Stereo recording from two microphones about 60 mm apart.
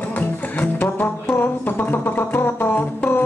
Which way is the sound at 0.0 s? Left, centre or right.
Left.